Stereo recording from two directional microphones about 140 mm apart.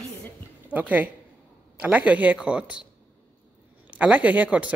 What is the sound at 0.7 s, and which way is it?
Speech, 10° right (ahead or behind).